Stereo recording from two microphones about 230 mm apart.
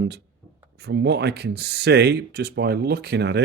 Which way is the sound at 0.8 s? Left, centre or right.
Right.